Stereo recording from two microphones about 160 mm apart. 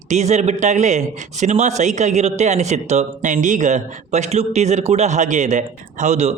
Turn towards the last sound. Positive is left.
turn(degrees=-45)  # may be behind; listen again after turning